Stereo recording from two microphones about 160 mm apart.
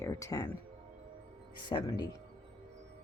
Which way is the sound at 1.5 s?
30° left (ahead or behind).